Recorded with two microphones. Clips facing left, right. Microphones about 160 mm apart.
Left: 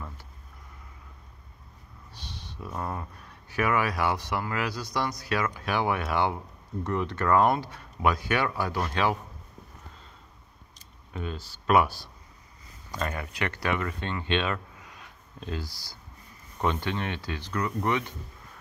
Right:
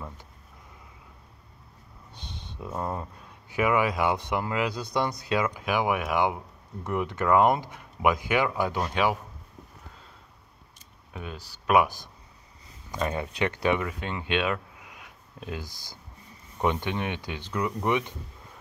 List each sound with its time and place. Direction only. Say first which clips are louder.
2.1 s speech: right 1 dB; 20° right (ahead or behind)
11.1 s speech: left 3 dB; 5° right (ahead or behind)